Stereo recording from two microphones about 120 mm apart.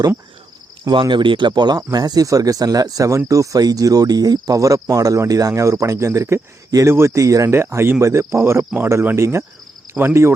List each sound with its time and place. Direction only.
0.9 s speech: 40° right (ahead or behind); by 10.3 s 20° right (ahead or behind)